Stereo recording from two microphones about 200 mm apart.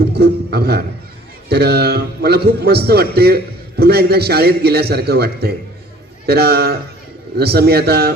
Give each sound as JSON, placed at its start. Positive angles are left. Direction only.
{"t": 0.0, "sound": "a man's voice", "side_deg": -55}